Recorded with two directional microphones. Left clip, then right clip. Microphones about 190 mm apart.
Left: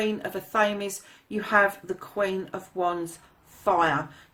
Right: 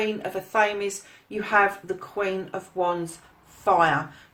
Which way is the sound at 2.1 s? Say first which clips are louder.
Even; 45° left (ahead or behind).